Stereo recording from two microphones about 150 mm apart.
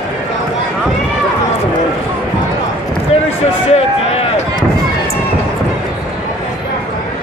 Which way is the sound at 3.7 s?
45° left (ahead or behind).